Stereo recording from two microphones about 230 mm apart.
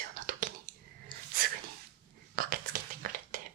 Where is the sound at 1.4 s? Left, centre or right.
Right.